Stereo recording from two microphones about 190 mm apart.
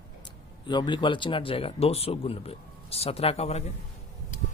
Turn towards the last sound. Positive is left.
turn(degrees=35)  # may be behind; listen again after turning